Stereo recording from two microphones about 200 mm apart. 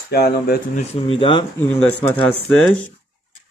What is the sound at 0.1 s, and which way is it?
Speech, 50° left (ahead or behind).